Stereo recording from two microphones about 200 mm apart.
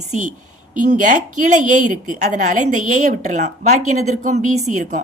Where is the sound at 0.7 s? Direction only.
40° right (ahead or behind).